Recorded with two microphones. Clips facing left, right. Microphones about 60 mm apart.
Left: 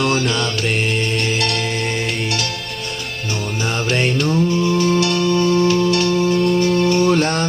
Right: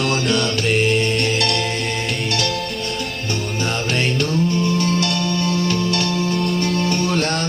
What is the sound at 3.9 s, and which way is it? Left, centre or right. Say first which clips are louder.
Music: left 3 dB; centre.